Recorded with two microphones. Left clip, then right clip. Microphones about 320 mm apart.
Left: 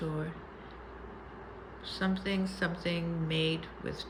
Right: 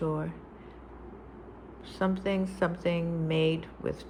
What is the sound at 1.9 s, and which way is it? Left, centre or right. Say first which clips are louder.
Speech: right 4 dB; centre.